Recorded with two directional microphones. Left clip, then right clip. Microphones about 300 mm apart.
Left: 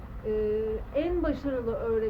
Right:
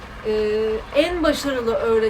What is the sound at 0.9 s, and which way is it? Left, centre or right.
Speech, centre.